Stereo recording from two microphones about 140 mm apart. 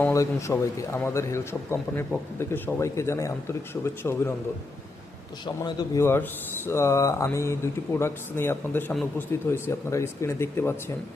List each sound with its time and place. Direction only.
0.0 s a man's voice: 20° left (ahead or behind)
5.6 s a man's voice: 30° left (ahead or behind)
6.0 s a man's voice: 15° left (ahead or behind)